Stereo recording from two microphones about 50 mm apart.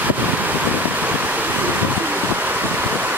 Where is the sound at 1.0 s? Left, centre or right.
Right.